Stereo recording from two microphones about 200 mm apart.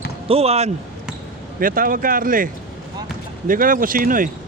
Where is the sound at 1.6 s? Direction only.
45° right (ahead or behind).